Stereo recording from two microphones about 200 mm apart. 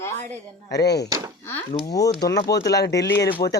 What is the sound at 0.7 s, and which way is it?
Speech, 55° left (ahead or behind).